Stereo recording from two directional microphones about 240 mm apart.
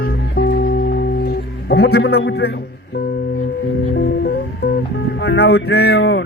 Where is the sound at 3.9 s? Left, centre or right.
Left.